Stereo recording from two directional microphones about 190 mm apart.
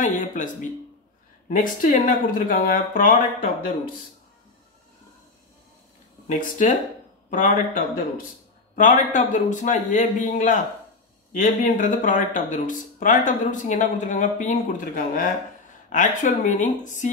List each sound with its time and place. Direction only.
0.0 s a man's voice: 40° left (ahead or behind)
1.5 s speech: 45° left (ahead or behind)
6.2 s a man's voice: 45° left (ahead or behind)